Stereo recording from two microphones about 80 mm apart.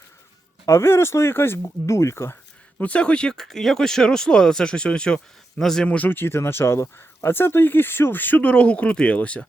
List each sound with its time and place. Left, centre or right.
0.6 s speech: left
2.7 s speech: centre
6.1 s speech: left